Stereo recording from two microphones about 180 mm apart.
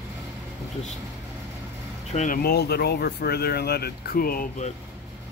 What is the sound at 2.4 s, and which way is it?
Speech, 60° left (ahead or behind).